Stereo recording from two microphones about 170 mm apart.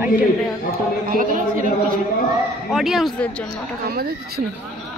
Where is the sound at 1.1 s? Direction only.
50° right (ahead or behind).